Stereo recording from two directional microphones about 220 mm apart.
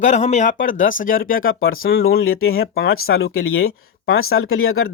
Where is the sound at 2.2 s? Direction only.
70° left (ahead or behind).